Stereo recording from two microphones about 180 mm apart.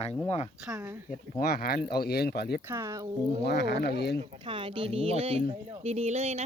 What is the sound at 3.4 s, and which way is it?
Speech, 65° left (ahead or behind).